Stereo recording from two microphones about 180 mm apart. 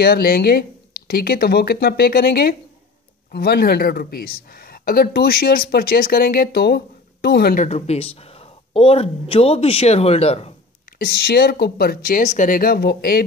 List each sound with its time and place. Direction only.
0.0 s speech: 60° left (ahead or behind)
7.6 s speech: 35° left (ahead or behind)
11.0 s speech: 60° left (ahead or behind)